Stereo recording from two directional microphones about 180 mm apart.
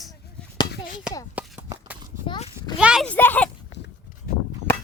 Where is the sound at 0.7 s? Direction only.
50° left (ahead or behind).